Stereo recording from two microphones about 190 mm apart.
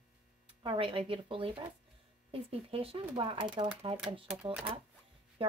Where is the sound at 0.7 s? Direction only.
30° right (ahead or behind).